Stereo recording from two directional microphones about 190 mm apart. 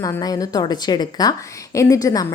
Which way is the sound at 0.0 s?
20° left (ahead or behind).